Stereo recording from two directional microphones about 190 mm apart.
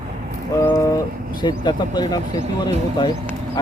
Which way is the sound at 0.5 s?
15° left (ahead or behind).